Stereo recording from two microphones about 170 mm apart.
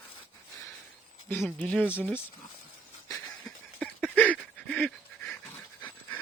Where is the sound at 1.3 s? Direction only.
5° left (ahead or behind).